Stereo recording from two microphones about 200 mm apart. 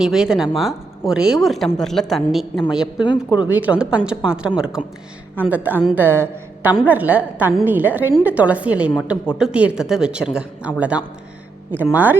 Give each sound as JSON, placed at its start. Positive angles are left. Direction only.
{"t": 0.0, "sound": "speech", "side_deg": 0}
{"t": 3.0, "sound": "speech", "side_deg": 25}
{"t": 3.4, "sound": "a woman's voice", "side_deg": -10}